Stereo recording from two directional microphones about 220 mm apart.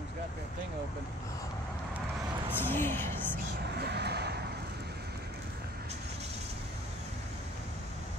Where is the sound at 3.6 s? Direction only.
50° right (ahead or behind).